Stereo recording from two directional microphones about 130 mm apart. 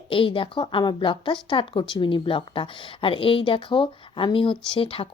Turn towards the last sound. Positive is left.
turn(degrees=45)  # may be behind; listen again after turning